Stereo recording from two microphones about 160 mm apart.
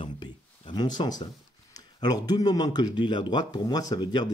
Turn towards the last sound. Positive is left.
turn(degrees=25)  # may be behind; listen again after turning